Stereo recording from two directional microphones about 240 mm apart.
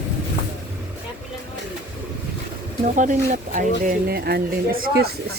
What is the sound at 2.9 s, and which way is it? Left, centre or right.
Speech, right.